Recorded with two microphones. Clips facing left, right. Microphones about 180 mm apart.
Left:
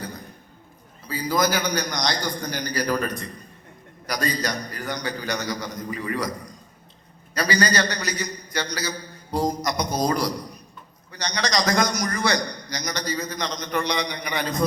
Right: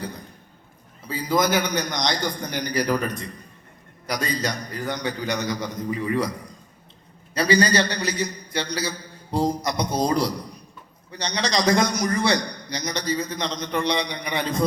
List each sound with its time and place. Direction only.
1.0 s a man's voice: 25° right (ahead or behind)
7.3 s a man's voice: 25° right (ahead or behind)